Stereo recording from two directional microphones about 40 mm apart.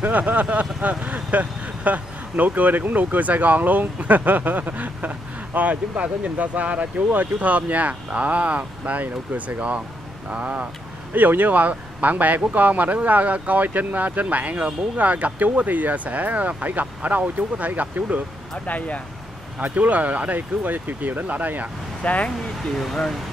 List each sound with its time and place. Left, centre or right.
0.0 s speech: right
9.0 s speech: right
10.3 s speech: right
11.1 s speech: right
18.7 s speech: left
19.6 s speech: right
22.0 s speech: left